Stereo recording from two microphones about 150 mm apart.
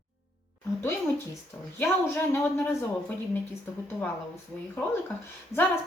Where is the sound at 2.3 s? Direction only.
15° left (ahead or behind).